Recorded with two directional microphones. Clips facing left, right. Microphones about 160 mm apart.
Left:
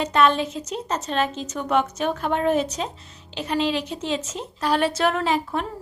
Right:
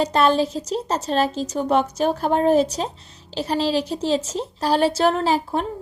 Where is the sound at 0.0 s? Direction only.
35° right (ahead or behind).